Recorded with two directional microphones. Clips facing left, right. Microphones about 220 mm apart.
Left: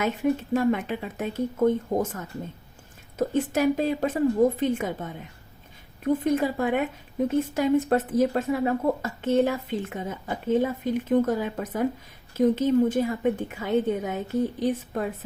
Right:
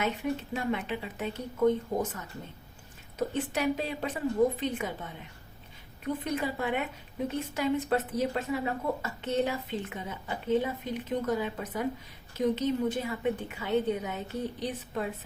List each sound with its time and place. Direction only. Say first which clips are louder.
0.0 s speech: left 6 dB; 45° left (ahead or behind)